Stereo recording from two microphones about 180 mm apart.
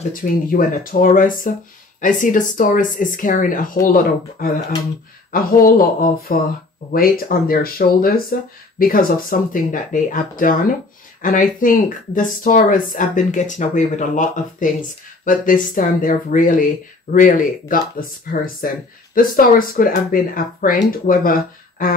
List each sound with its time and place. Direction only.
0.1 s speech: 50° left (ahead or behind)